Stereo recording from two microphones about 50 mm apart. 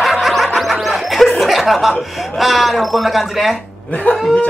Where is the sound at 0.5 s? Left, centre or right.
Centre.